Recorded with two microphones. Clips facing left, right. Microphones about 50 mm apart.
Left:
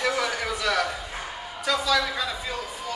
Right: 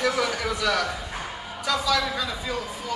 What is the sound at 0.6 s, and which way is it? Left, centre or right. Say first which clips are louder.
Speech: even; centre.